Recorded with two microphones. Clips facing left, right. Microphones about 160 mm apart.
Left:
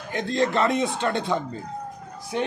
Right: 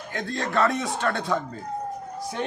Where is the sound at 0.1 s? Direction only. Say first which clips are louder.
Left 5 dB; 20° left (ahead or behind).